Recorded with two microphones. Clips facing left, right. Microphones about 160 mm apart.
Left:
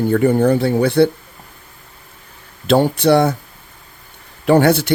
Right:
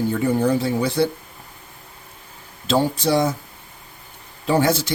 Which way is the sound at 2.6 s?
65° left (ahead or behind).